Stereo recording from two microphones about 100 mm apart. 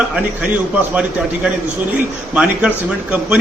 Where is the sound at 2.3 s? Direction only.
10° right (ahead or behind).